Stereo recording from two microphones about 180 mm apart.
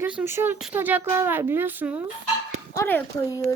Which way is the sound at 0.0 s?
10° right (ahead or behind).